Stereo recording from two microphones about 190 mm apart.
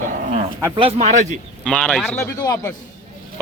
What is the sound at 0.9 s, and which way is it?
Speech, 40° right (ahead or behind).